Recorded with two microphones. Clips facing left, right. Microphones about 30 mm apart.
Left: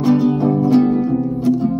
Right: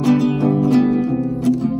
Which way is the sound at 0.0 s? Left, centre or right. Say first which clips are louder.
Left 1 dB; right.